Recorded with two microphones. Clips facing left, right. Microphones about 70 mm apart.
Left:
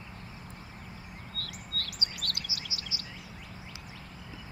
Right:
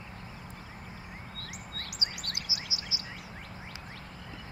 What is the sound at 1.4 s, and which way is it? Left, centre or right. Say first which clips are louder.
Chirp: left 6 dB; centre.